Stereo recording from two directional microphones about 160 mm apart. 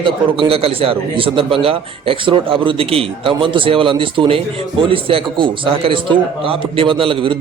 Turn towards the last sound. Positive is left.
turn(degrees=-35)  # may be behind; listen again after turning